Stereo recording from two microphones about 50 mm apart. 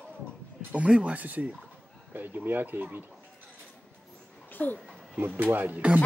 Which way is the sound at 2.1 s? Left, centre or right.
Right.